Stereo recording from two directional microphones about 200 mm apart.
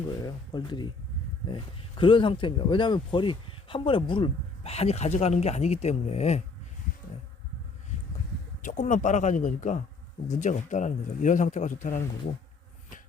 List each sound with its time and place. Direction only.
0.2 s speech: 20° left (ahead or behind)
8.6 s speech: 40° left (ahead or behind)